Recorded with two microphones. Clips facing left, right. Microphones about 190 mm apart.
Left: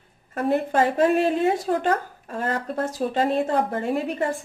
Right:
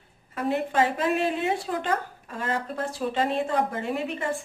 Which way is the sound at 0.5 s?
45° left (ahead or behind).